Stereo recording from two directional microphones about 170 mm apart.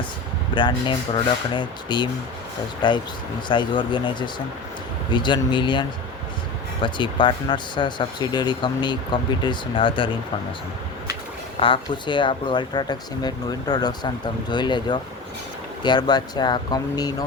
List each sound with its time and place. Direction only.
0.5 s speech: 30° left (ahead or behind)
6.8 s speech: 30° left (ahead or behind)
11.6 s speech: 30° left (ahead or behind)